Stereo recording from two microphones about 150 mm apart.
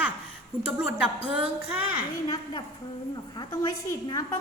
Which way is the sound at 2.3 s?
25° left (ahead or behind).